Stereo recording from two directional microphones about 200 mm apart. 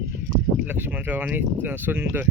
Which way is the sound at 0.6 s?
10° right (ahead or behind).